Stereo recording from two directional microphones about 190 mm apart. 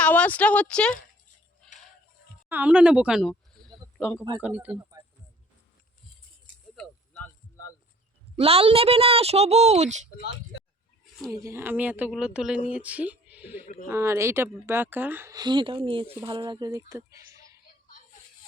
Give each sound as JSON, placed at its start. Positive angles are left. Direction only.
{"t": 0.0, "sound": "speech", "side_deg": 10}
{"t": 2.5, "sound": "speech", "side_deg": -10}
{"t": 6.7, "sound": "a sound", "side_deg": 5}
{"t": 8.4, "sound": "a woman's voice", "side_deg": -30}
{"t": 11.4, "sound": "speech", "side_deg": -10}